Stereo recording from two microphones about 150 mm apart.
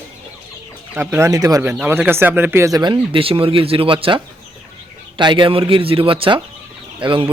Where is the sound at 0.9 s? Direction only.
15° right (ahead or behind).